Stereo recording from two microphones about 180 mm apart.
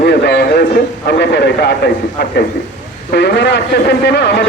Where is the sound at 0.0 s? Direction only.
65° left (ahead or behind).